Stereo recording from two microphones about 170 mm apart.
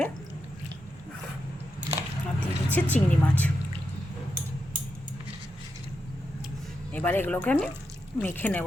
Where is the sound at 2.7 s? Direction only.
10° left (ahead or behind).